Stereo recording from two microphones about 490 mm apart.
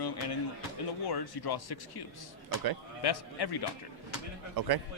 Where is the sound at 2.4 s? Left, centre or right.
Right.